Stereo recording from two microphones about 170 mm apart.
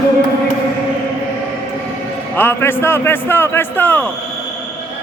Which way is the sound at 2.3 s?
10° left (ahead or behind).